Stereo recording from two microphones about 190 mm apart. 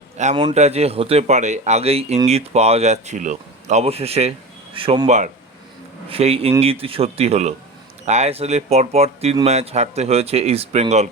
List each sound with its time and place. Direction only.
0.2 s speech: 40° right (ahead or behind)